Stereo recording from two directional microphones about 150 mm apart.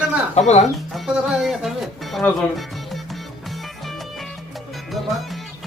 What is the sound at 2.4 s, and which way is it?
Music, centre (ahead or behind).